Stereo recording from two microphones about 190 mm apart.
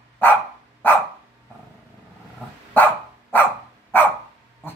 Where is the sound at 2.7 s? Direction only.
10° left (ahead or behind).